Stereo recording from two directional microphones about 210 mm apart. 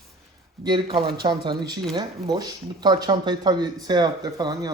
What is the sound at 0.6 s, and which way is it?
Speech, 20° right (ahead or behind).